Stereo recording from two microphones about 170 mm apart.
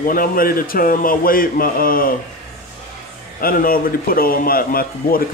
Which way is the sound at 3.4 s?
60° left (ahead or behind).